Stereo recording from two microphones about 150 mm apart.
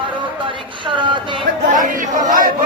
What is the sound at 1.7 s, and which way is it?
Crowd, 60° right (ahead or behind).